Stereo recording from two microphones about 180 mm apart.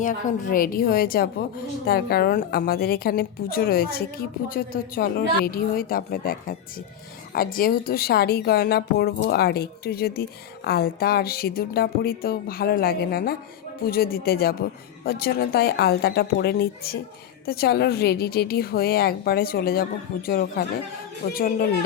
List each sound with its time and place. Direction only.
0.0 s a woman's voice: 45° left (ahead or behind)
7.3 s a woman's voice: 55° left (ahead or behind)